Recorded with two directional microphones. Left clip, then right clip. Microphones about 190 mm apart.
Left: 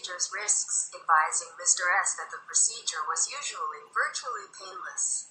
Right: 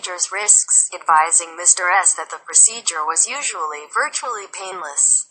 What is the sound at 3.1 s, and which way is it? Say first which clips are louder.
Speech: right 10 dB; 50° right (ahead or behind).